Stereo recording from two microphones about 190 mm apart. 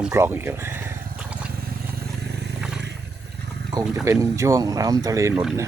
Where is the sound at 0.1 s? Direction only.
15° right (ahead or behind).